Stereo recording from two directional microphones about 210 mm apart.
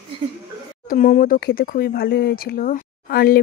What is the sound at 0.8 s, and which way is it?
Speech, 40° left (ahead or behind).